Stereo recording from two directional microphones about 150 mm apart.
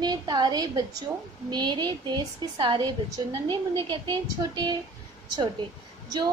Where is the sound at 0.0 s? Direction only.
30° right (ahead or behind).